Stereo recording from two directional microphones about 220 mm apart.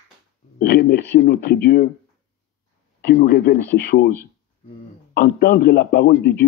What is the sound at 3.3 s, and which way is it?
Speech, 45° left (ahead or behind).